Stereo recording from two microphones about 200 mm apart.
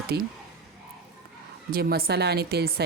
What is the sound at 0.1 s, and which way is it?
Speech, 55° right (ahead or behind).